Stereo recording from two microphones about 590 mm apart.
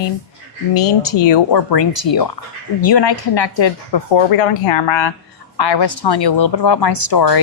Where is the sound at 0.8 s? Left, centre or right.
Left.